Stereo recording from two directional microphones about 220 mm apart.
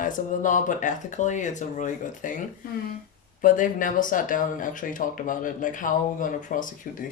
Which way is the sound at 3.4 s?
35° left (ahead or behind).